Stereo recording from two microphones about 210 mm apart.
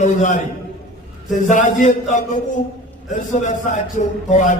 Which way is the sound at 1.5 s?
35° left (ahead or behind).